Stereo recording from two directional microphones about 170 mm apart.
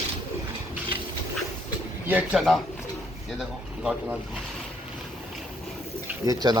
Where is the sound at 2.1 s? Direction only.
5° right (ahead or behind).